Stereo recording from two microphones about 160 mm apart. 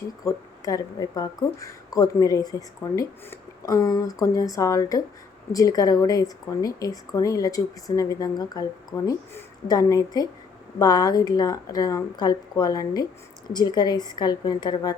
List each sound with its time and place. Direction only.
0.3 s speech: 20° left (ahead or behind)